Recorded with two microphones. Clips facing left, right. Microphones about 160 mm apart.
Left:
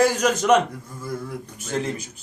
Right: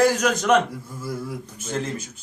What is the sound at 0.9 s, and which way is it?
Speech, 10° right (ahead or behind).